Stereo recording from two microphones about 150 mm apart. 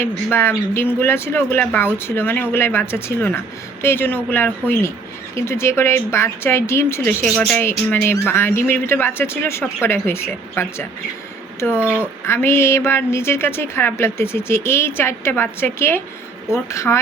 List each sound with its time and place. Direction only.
0.3 s a woman's voice: 15° left (ahead or behind)
11.8 s speech: 10° right (ahead or behind)
12.2 s a woman's voice: 15° left (ahead or behind)